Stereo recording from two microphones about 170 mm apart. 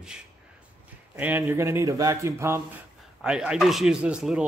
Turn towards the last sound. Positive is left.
turn(degrees=-5)  # may be behind; listen again after turning